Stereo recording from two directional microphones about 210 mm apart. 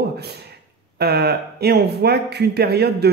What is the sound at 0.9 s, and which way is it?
Speech, 50° right (ahead or behind).